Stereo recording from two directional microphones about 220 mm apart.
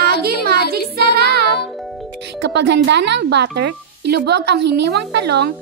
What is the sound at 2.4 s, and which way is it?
Speech, 50° right (ahead or behind).